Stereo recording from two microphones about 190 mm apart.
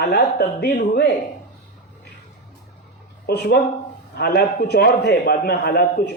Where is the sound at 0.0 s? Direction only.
60° left (ahead or behind).